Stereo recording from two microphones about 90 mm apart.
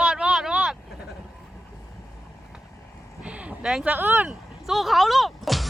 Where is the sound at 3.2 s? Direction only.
15° right (ahead or behind).